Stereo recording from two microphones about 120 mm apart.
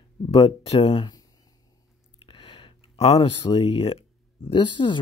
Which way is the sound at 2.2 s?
45° left (ahead or behind).